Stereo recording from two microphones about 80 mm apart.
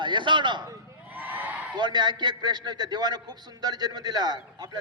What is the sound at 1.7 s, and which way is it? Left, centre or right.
A man's voice, right.